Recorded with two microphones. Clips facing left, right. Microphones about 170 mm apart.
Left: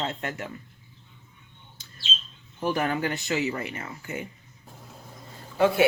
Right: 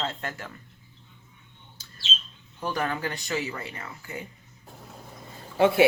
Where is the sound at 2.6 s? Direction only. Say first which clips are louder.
Left 3 dB; 20° left (ahead or behind).